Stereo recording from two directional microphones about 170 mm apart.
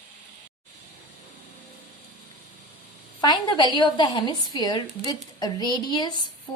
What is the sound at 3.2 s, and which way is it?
A woman's voice, 25° left (ahead or behind).